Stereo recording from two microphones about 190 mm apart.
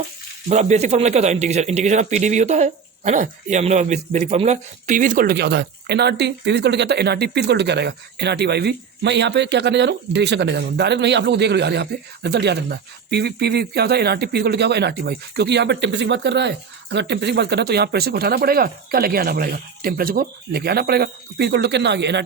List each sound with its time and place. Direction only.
0.4 s speech: 35° right (ahead or behind); by 22.2 s 65° right (ahead or behind)